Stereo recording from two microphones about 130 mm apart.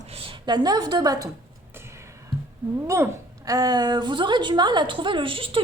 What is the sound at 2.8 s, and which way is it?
A woman's voice, 25° right (ahead or behind).